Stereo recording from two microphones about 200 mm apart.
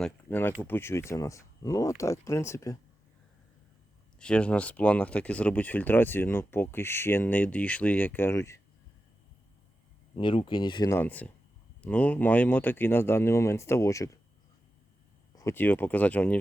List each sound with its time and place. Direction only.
0.0 s speech: 10° left (ahead or behind)
4.2 s speech: 5° left (ahead or behind)
10.2 s speech: 25° left (ahead or behind)
10.9 s speech: 10° left (ahead or behind)
15.4 s speech: 10° left (ahead or behind)